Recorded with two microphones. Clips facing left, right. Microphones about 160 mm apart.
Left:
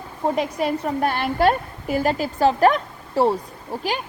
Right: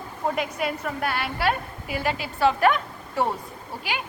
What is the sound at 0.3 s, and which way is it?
A woman's voice, 35° left (ahead or behind).